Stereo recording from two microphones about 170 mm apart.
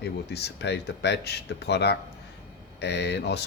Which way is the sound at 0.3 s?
80° left.